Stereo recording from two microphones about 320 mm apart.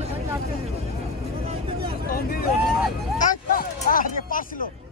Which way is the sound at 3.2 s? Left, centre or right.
Left.